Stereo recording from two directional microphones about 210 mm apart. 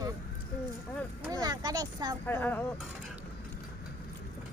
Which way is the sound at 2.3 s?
10° left (ahead or behind).